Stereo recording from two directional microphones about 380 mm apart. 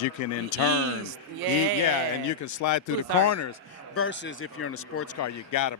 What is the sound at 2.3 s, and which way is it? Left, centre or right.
A man's voice, left.